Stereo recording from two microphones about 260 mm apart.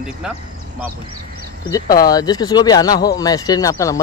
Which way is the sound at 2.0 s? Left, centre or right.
Centre.